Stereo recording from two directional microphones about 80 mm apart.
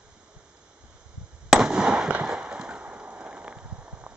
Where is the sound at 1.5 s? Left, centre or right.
Centre.